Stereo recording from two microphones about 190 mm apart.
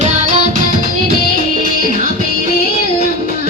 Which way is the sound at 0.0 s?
35° right (ahead or behind).